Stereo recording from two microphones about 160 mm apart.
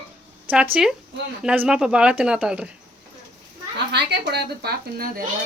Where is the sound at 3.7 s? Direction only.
90° right; by 5.2 s 70° right (ahead or behind).